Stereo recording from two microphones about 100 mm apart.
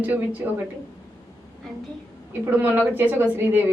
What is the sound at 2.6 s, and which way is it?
A woman's voice, 15° right (ahead or behind).